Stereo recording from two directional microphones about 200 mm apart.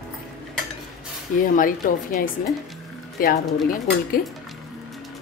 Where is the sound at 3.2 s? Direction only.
45° left (ahead or behind).